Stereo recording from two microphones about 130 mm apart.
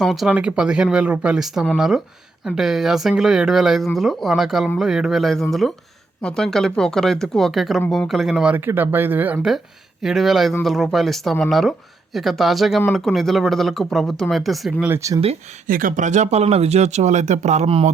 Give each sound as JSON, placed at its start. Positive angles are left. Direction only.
{"t": 0.0, "sound": "speech", "side_deg": 0}
{"t": 10.0, "sound": "speech", "side_deg": 0}
{"t": 14.8, "sound": "speech", "side_deg": -20}
{"t": 15.6, "sound": "speech", "side_deg": -90}